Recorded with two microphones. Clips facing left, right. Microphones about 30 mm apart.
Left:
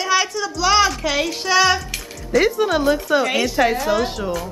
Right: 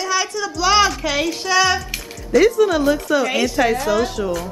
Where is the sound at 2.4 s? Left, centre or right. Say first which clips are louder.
Right 4 dB; centre.